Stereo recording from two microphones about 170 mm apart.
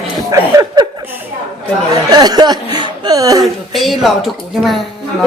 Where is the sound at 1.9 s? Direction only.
25° right (ahead or behind).